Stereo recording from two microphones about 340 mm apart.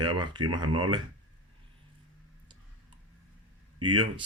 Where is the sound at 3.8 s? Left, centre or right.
Centre.